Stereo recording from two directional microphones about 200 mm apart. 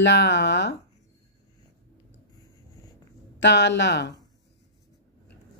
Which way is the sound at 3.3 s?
60° left (ahead or behind).